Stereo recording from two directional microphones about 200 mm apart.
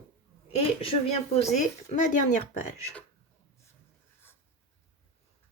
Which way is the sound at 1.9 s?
40° left (ahead or behind).